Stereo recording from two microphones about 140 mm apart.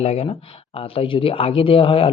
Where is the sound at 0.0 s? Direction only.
50° left (ahead or behind).